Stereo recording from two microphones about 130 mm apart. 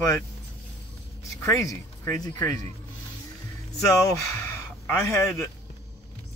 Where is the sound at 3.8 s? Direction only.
25° left (ahead or behind).